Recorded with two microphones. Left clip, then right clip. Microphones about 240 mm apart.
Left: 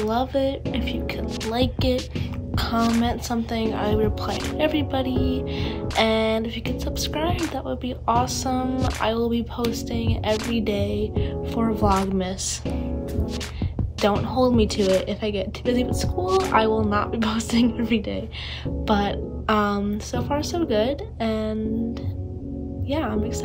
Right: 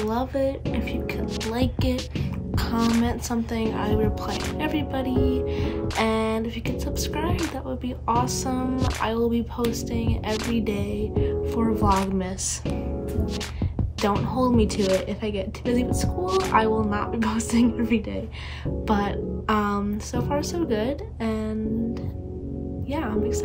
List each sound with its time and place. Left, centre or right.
0.0 s a woman's voice: centre
14.0 s a woman's voice: centre
22.8 s a woman's voice: centre